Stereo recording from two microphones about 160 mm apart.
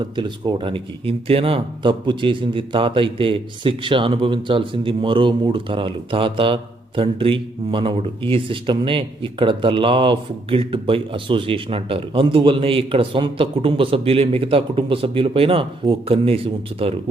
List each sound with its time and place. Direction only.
0.0 s speech: 30° right (ahead or behind)